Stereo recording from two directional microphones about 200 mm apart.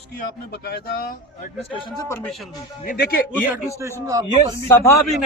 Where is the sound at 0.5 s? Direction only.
55° left (ahead or behind).